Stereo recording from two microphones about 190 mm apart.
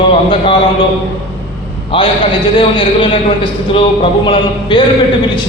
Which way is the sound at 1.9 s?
30° left (ahead or behind).